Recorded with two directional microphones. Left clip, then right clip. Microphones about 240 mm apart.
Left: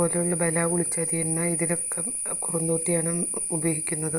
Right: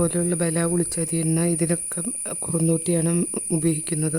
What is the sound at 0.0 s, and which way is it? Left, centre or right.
Speech, right.